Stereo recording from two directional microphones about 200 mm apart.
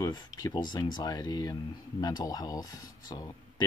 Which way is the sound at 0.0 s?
15° left (ahead or behind).